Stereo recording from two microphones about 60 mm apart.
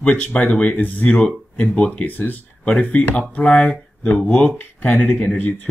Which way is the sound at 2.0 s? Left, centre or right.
Left.